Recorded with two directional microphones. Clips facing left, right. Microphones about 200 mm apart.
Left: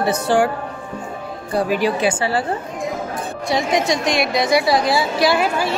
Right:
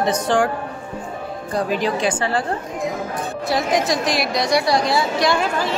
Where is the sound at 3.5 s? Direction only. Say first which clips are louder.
Left 1 dB; centre (ahead or behind).